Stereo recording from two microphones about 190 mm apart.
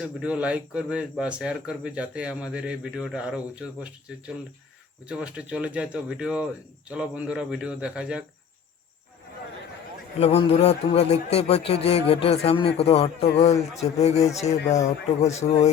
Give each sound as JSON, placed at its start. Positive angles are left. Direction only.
{"t": 0.0, "sound": "speech", "side_deg": -5}
{"t": 5.0, "sound": "speech", "side_deg": -5}
{"t": 10.2, "sound": "a man's voice", "side_deg": 30}